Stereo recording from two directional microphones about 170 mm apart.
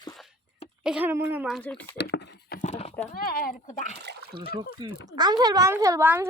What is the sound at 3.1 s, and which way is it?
Speech, 60° left (ahead or behind).